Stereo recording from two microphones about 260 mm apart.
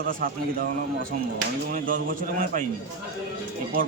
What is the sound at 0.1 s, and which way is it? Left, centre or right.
Speech, right.